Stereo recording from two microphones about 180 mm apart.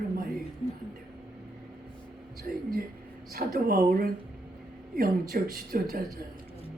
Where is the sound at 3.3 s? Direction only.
55° right (ahead or behind).